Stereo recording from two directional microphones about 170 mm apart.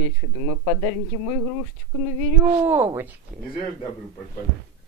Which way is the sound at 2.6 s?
10° right (ahead or behind).